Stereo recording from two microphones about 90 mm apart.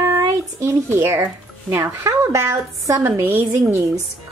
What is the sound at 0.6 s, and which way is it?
Speech, 30° right (ahead or behind).